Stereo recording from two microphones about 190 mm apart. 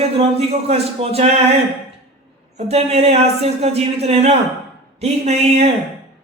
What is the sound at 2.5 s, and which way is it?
Speech, 35° right (ahead or behind).